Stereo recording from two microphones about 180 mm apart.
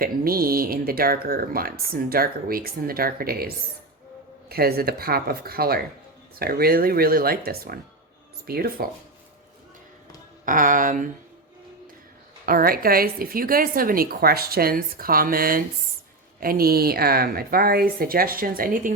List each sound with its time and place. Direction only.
0.0 s speech: 55° right (ahead or behind)
10.4 s speech: 50° right (ahead or behind)
12.5 s speech: 55° right (ahead or behind)